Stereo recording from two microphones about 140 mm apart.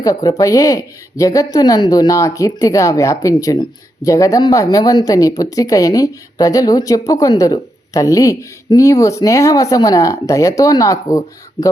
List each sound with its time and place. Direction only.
0.0 s speech: 25° left (ahead or behind)